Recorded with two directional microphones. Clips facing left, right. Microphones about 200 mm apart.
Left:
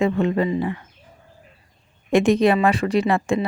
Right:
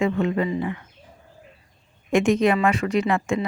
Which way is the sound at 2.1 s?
35° left (ahead or behind).